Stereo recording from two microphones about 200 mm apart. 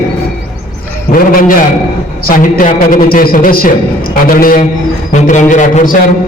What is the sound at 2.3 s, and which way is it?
A woman's voice, 40° left (ahead or behind).